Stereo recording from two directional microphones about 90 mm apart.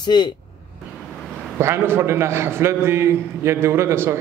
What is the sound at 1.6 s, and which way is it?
A man's voice, 30° right (ahead or behind).